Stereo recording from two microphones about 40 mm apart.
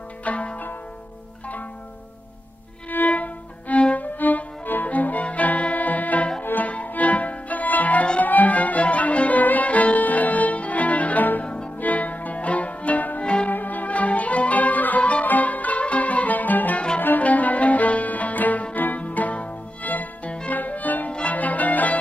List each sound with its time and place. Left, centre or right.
0.3 s zither: left
2.9 s violin: left
3.7 s music: left
4.0 s music: left
6.4 s music: left
6.7 s music: left
11.4 s music: left
11.8 s music: left
13.2 s music: left
13.5 s music: left
17.2 s music: left
21.1 s music: left
21.3 s music: left